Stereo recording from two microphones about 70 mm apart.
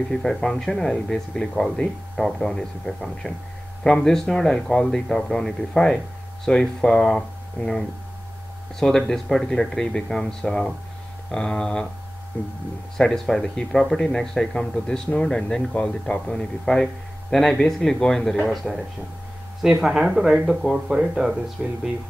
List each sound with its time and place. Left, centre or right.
0.1 s speech: centre
12.9 s speech: centre